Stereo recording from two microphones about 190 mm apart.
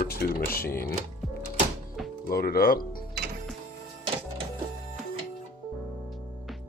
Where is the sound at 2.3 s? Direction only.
50° left (ahead or behind).